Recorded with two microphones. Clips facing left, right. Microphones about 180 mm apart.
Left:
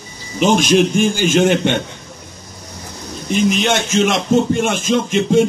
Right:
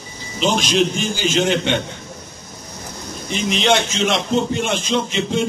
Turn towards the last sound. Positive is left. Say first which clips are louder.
# left 6 dB
turn(degrees=50)  # may be behind; listen again after turning